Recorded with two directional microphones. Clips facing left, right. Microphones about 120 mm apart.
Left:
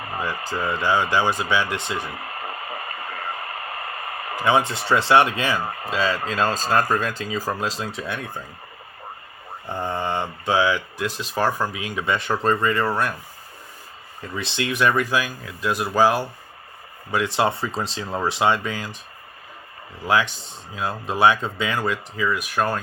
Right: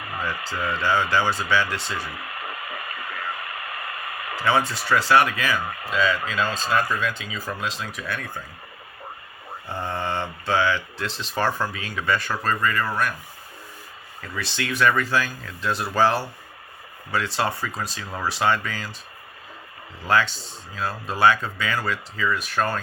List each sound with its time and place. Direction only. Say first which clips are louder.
0.5 s speech: left 2 dB; 20° left (ahead or behind)
2.1 s radio: left 2 dB; 35° left (ahead or behind)
4.4 s speech: left 2 dB; 20° left (ahead or behind)
9.6 s speech: left 2 dB; 15° left (ahead or behind)
14.2 s speech: left 3 dB; 20° left (ahead or behind)
20.1 s speech: left 1 dB; 15° left (ahead or behind)